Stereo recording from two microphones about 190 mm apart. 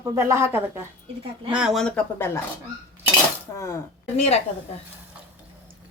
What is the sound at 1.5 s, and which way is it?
Speech, centre (ahead or behind).